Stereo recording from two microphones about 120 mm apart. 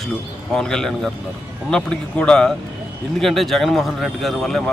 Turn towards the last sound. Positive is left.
turn(degrees=5)  # may be behind; listen again after turning